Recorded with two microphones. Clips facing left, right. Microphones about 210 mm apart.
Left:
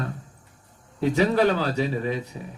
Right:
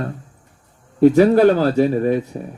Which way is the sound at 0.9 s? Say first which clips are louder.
Right 10 dB; 45° right (ahead or behind).